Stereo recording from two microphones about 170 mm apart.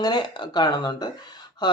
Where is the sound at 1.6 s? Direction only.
25° left (ahead or behind).